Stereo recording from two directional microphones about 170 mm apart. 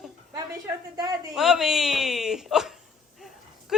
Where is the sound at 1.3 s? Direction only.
5° right (ahead or behind).